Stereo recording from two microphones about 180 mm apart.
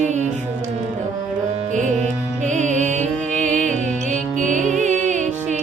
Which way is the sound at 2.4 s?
40° right (ahead or behind).